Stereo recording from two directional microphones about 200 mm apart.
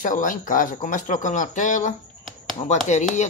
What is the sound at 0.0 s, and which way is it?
Speech, 40° left (ahead or behind).